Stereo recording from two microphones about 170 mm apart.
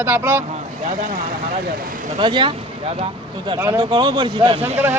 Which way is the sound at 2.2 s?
30° right (ahead or behind).